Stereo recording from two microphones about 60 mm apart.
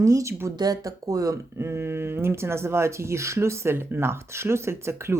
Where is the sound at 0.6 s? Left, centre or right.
Right.